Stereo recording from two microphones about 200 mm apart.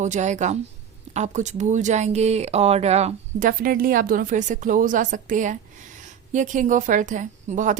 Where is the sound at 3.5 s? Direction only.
45° right (ahead or behind).